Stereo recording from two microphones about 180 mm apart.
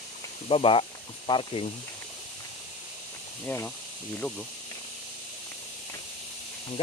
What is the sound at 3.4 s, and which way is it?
Speech, 10° left (ahead or behind).